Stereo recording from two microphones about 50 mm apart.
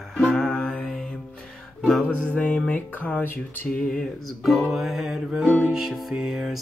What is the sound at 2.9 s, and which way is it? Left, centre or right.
Speech, left.